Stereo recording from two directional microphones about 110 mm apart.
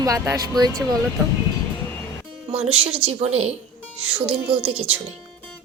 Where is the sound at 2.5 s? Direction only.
60° right (ahead or behind).